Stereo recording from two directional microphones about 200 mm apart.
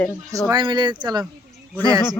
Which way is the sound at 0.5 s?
20° right (ahead or behind).